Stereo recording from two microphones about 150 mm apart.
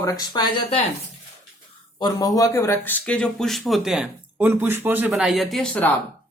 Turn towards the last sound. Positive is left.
turn(degrees=5)  # may be behind; listen again after turning